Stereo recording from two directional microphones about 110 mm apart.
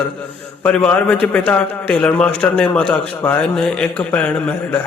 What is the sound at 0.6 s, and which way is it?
A man's voice, 10° left (ahead or behind).